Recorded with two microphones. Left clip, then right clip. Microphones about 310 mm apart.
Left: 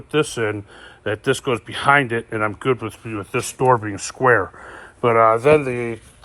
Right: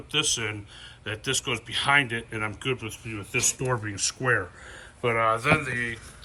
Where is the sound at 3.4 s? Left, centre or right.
Centre.